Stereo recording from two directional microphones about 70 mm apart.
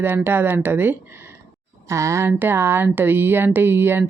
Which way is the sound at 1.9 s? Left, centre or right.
Right.